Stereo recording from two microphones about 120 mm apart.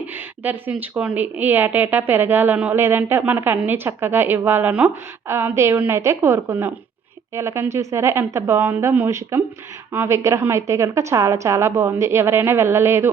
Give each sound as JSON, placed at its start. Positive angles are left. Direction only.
{"t": 0.1, "sound": "a woman's voice", "side_deg": -15}